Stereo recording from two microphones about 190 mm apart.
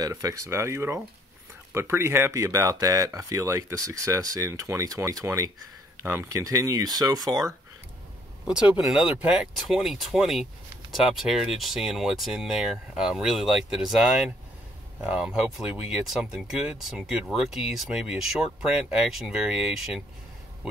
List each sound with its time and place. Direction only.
0.0 s speech: 15° right (ahead or behind)
8.5 s speech: 5° right (ahead or behind)